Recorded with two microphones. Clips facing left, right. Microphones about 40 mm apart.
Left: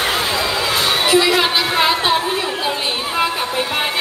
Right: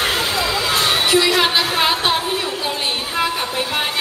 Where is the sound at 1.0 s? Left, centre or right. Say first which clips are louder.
Left 3 dB; centre.